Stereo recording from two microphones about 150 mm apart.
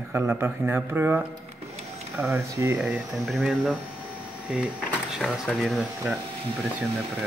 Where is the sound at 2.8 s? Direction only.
Centre (ahead or behind).